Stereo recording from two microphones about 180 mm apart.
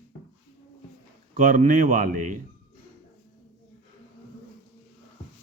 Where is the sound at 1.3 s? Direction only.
45° right (ahead or behind).